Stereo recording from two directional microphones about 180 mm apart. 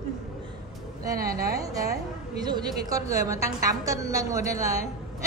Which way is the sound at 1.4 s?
20° right (ahead or behind).